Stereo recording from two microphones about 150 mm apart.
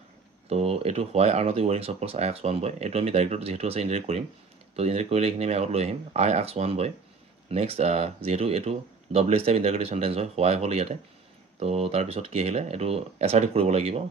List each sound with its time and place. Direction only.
0.5 s speech: 40° right (ahead or behind)